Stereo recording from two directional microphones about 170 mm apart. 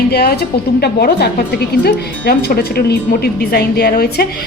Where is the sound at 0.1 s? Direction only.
65° left (ahead or behind).